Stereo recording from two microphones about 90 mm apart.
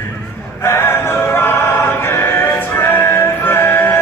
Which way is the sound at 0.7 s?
25° left (ahead or behind).